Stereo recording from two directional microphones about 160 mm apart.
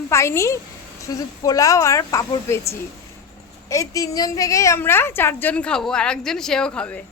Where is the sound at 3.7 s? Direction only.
20° left (ahead or behind).